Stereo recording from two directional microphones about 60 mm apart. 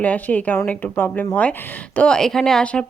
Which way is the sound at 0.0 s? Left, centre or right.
Left.